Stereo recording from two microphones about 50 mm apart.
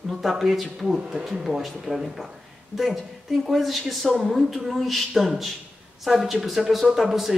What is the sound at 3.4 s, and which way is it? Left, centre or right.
Speech, centre.